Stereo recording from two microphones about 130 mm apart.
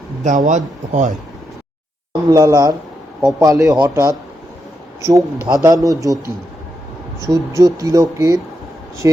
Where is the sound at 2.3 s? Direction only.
30° right (ahead or behind).